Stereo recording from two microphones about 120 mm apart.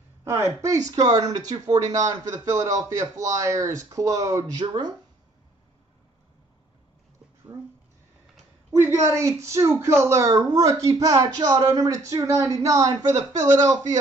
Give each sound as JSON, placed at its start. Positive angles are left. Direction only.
{"t": 0.2, "sound": "a woman's voice", "side_deg": -25}
{"t": 9.0, "sound": "a woman's voice", "side_deg": -25}